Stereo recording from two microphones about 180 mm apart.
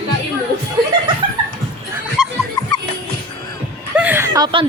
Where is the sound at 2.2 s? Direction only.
5° right (ahead or behind).